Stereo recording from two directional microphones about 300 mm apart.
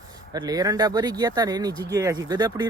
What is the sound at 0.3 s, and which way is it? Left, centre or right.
Speech, centre.